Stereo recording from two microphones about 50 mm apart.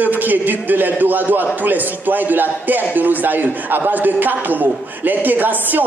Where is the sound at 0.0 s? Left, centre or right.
Right.